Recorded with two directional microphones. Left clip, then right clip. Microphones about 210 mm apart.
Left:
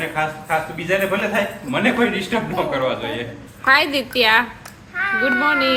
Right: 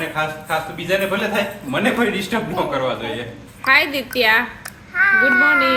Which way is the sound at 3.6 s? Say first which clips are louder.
Even; 5° left (ahead or behind).